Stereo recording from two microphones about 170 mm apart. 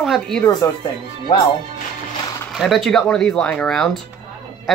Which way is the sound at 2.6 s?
Centre (ahead or behind).